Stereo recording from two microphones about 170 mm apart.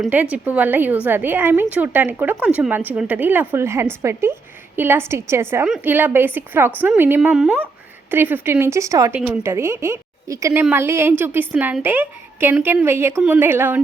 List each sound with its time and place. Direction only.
0.0 s a woman's voice: 10° right (ahead or behind)